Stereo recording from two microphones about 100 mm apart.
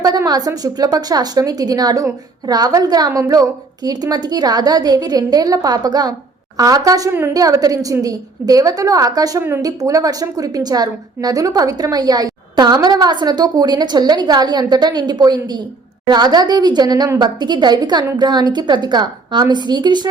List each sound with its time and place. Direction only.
0.3 s a woman's voice: 40° right (ahead or behind)